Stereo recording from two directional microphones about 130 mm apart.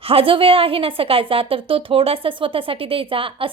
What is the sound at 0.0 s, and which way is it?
A woman's voice, 45° right (ahead or behind).